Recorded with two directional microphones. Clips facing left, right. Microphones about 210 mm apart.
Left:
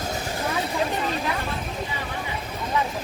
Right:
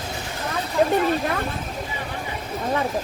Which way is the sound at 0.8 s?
55° right (ahead or behind).